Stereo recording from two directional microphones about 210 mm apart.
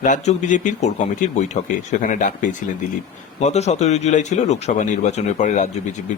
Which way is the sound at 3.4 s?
30° left (ahead or behind).